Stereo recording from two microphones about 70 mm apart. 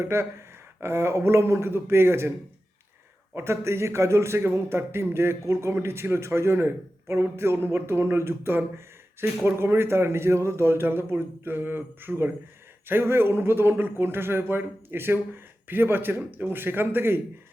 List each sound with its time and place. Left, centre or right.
0.0 s a man's voice: right
3.3 s a man's voice: right